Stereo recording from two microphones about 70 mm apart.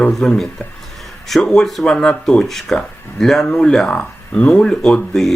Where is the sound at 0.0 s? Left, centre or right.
Centre.